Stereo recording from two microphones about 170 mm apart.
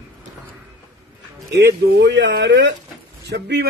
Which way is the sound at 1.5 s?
90° right.